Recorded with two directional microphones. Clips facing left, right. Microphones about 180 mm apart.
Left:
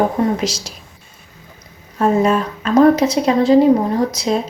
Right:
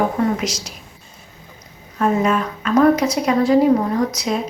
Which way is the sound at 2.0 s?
30° left (ahead or behind).